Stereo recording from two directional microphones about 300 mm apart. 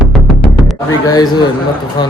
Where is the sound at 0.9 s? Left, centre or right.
Centre.